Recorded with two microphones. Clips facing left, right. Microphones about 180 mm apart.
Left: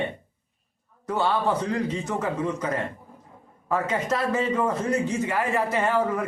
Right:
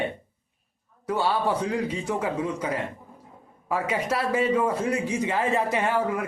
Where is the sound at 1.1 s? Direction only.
10° right (ahead or behind).